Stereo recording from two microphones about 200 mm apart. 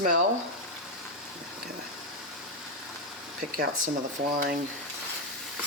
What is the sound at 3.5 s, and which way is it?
Speech, 45° right (ahead or behind).